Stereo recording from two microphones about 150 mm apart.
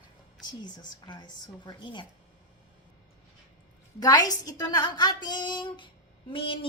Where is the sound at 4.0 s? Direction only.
25° left (ahead or behind).